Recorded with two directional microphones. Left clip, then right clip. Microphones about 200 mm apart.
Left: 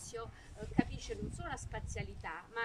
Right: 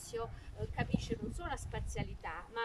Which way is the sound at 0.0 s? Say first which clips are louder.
Right 4 dB; 5° right (ahead or behind).